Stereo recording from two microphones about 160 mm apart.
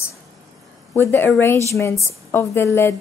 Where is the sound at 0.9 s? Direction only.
15° left (ahead or behind).